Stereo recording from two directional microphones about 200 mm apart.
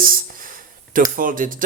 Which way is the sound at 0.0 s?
45° right (ahead or behind).